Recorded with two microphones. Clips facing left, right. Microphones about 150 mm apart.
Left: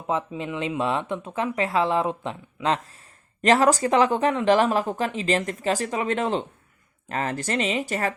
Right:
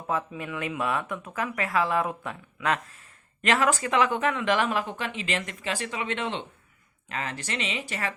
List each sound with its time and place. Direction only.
0.1 s speech: 20° left (ahead or behind); by 8.1 s 40° left (ahead or behind)